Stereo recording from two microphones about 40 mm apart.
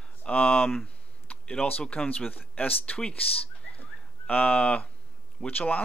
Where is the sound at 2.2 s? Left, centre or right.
Left.